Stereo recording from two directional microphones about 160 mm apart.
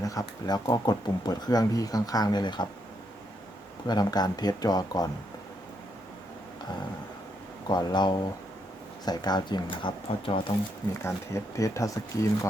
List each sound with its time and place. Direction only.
0.0 s speech: 20° left (ahead or behind)
3.8 s speech: 25° left (ahead or behind)
7.7 s speech: 25° left (ahead or behind)
11.0 s speech: 20° left (ahead or behind)